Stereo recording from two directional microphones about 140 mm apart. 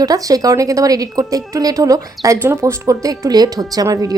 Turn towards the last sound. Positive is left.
turn(degrees=-25)  # may be behind; listen again after turning